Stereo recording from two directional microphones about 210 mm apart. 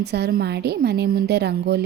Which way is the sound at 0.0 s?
50° right (ahead or behind).